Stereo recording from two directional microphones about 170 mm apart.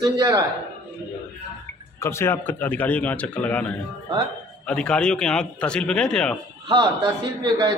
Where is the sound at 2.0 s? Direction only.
15° left (ahead or behind).